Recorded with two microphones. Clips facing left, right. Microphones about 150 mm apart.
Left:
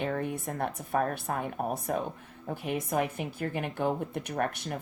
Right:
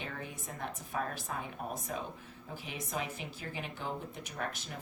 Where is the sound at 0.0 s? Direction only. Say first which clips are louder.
Left 12 dB; 60° left (ahead or behind).